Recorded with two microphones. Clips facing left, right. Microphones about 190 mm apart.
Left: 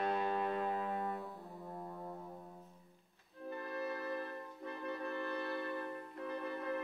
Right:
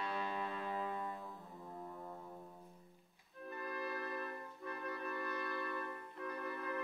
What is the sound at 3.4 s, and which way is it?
Music, 25° left (ahead or behind).